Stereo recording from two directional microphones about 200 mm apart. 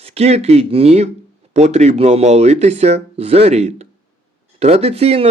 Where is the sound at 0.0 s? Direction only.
30° right (ahead or behind).